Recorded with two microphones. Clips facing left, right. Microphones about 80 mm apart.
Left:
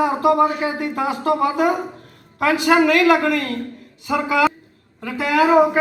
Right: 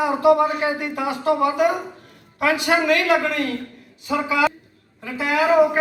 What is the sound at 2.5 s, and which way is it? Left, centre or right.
A man's voice, left.